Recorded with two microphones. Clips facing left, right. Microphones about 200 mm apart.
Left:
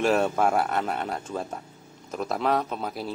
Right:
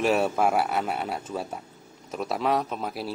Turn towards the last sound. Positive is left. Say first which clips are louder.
# even
turn(degrees=-5)  # may be behind; listen again after turning